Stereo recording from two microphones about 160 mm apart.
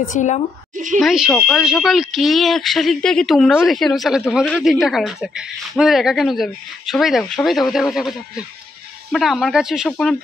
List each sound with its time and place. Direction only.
0.1 s a woman's voice: 50° left (ahead or behind)
0.9 s speech: centre (ahead or behind)